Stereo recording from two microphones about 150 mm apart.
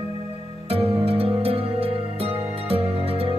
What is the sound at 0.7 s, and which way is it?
Music, 40° right (ahead or behind).